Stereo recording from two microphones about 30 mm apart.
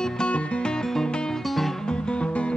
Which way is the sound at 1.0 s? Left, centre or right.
Left.